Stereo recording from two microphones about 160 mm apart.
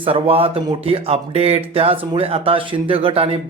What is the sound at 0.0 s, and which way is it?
Speech, 35° right (ahead or behind).